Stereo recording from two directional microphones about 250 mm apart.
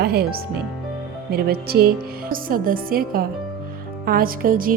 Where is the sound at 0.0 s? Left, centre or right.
Right.